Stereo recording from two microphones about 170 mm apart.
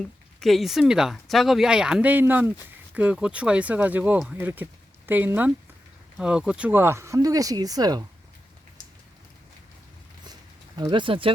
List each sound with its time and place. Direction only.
0.4 s speech: centre (ahead or behind); by 8.0 s 20° right (ahead or behind)
10.8 s speech: 25° right (ahead or behind)